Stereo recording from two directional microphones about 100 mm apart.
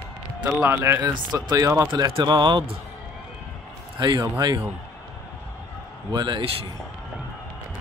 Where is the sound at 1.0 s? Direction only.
45° right (ahead or behind).